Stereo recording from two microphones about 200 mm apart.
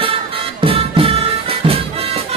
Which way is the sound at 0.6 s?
25° right (ahead or behind).